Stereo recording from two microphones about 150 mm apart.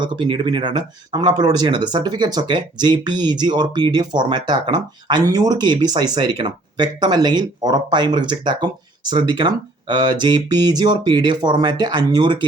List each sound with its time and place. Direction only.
0.0 s speech: 30° right (ahead or behind)